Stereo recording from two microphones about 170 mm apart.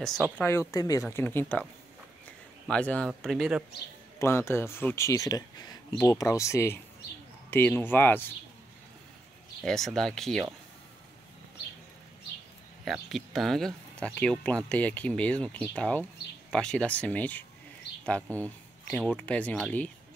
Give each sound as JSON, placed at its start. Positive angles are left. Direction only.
{"t": 0.0, "sound": "speech", "side_deg": 0}
{"t": 0.4, "sound": "speech", "side_deg": 15}
{"t": 2.7, "sound": "speech", "side_deg": 5}
{"t": 4.2, "sound": "speech", "side_deg": 15}
{"t": 9.7, "sound": "speech", "side_deg": 0}
{"t": 12.8, "sound": "speech", "side_deg": 0}